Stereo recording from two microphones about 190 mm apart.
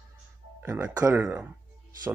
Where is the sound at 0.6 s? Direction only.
10° right (ahead or behind).